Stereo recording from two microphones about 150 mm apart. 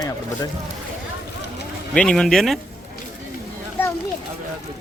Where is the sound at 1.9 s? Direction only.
5° left (ahead or behind).